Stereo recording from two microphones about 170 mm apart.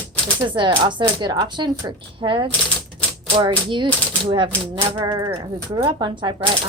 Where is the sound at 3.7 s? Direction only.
30° right (ahead or behind).